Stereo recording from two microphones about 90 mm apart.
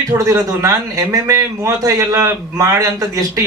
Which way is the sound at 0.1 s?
40° right (ahead or behind).